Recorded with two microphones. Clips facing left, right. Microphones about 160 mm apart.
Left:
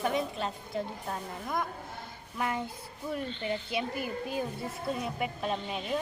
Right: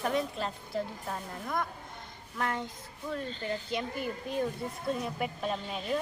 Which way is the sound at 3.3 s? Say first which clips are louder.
Left 1 dB; 40° right (ahead or behind).